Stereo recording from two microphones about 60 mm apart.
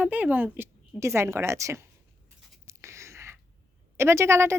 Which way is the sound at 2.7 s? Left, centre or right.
Right.